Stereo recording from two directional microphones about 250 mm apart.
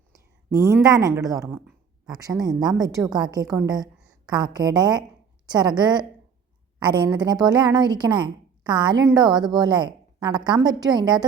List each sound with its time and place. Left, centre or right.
0.7 s a woman's voice: centre